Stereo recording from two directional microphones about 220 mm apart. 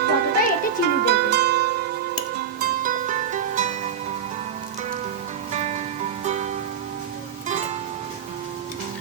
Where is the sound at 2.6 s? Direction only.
35° right (ahead or behind).